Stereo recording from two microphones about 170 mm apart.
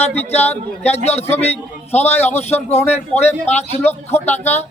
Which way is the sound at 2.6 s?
40° left (ahead or behind).